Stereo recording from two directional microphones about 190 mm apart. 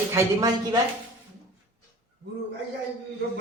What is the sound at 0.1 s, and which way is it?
Speech, 20° right (ahead or behind).